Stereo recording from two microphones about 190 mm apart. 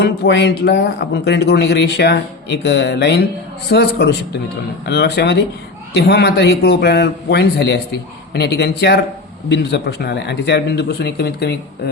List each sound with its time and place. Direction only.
0.0 s speech: 60° left (ahead or behind)